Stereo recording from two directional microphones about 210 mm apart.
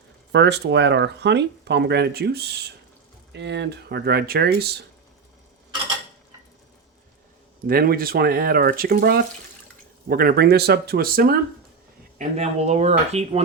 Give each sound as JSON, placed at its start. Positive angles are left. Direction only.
{"t": 0.3, "sound": "speech", "side_deg": -55}
{"t": 7.7, "sound": "speech", "side_deg": -45}
{"t": 12.4, "sound": "speech", "side_deg": -30}